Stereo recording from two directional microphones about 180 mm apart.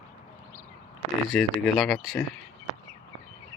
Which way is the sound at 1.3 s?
5° left (ahead or behind).